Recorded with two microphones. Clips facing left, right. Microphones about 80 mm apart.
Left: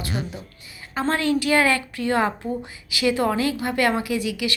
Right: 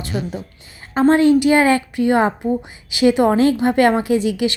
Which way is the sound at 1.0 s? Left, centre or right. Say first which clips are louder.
Right 10 dB; right.